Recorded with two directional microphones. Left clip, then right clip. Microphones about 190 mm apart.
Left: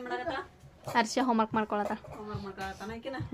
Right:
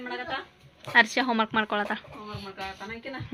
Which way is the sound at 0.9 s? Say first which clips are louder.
Right 6 dB; 10° left (ahead or behind).